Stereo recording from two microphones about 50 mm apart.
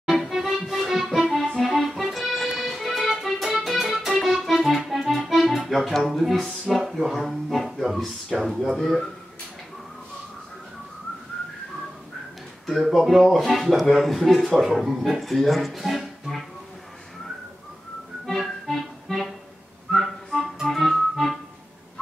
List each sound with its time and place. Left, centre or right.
0.0 s accordion: centre
6.9 s speech: centre
12.6 s speech: centre
18.4 s accordion: centre
19.9 s music: centre